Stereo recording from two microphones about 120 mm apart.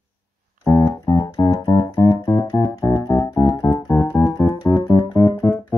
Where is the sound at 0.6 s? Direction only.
30° left (ahead or behind).